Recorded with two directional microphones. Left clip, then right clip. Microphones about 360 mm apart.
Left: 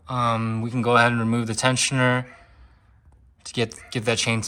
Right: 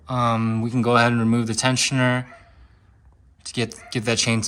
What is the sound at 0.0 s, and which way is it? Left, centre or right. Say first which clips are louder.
Speech: right 1 dB; centre.